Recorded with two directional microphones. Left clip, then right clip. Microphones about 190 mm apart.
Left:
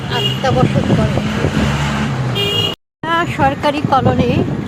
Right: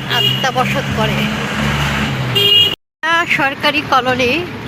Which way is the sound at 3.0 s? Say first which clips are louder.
Right 1 dB; 15° left (ahead or behind).